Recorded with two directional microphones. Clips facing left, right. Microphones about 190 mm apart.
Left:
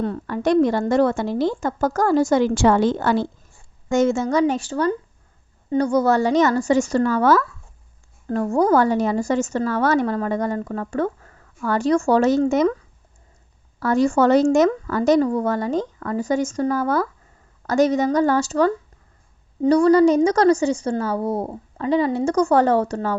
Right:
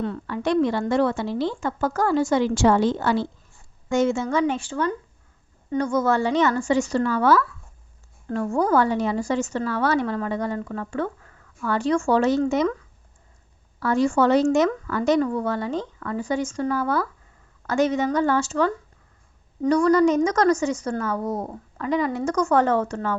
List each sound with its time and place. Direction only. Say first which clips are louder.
0.0 s a woman's voice: left 4 dB; 40° left (ahead or behind)
13.7 s a woman's voice: left 3 dB; 40° left (ahead or behind)